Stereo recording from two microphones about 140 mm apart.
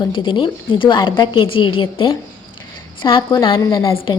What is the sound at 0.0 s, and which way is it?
A woman's voice, 40° left (ahead or behind).